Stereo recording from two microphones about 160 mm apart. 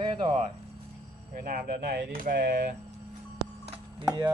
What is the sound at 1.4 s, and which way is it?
Speech, 65° right (ahead or behind).